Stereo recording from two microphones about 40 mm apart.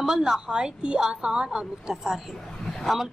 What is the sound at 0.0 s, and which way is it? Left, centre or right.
A woman's voice, centre.